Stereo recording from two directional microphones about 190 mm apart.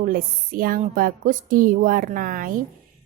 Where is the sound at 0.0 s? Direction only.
50° right (ahead or behind).